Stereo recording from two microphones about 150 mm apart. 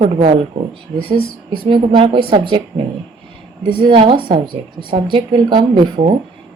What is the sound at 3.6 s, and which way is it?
Speech, 35° right (ahead or behind).